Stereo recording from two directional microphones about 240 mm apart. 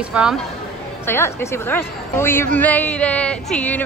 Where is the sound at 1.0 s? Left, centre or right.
Centre.